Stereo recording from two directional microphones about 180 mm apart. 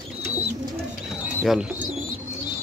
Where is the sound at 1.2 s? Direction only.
5° right (ahead or behind).